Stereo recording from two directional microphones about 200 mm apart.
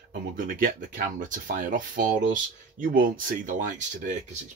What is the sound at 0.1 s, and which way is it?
Speech, 45° right (ahead or behind).